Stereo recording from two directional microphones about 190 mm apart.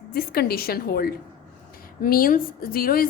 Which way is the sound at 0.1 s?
55° left (ahead or behind).